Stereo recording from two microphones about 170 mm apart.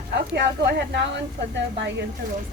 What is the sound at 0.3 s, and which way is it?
Speech, 85° right.